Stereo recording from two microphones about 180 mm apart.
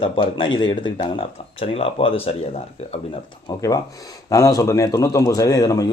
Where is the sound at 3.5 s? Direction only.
20° left (ahead or behind).